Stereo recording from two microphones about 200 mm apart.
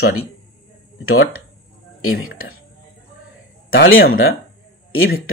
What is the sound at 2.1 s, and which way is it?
Speech, 90° left.